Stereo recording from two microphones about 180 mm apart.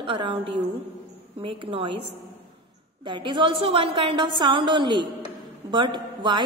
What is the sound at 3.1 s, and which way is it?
A woman's voice, 25° right (ahead or behind).